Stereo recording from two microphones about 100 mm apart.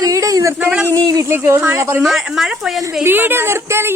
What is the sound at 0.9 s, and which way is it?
Speech, 35° right (ahead or behind).